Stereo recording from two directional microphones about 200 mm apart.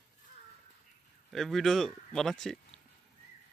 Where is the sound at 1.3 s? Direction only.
Centre (ahead or behind).